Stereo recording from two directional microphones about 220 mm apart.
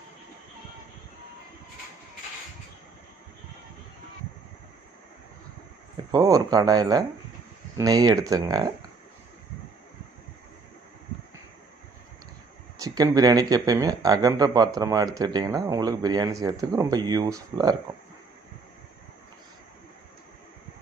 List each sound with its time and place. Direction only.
6.1 s speech: 15° right (ahead or behind)
12.7 s speech: 15° right (ahead or behind)